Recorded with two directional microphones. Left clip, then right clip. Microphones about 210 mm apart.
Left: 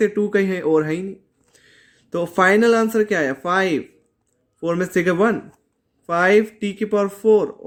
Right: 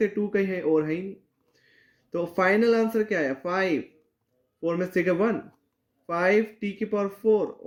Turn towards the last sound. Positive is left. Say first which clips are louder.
# left 7 dB
turn(degrees=40)  # may be behind; listen again after turning